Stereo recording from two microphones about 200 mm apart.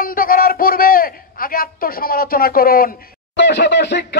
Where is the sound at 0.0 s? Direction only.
45° left (ahead or behind).